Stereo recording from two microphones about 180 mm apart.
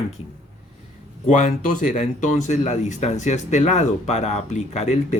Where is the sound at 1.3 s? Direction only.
45° left (ahead or behind).